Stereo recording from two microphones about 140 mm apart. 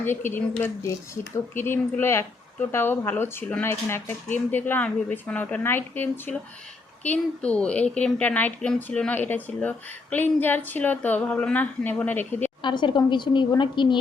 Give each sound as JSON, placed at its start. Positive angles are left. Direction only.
{"t": 0.0, "sound": "speech", "side_deg": 15}
{"t": 12.6, "sound": "a woman's voice", "side_deg": 35}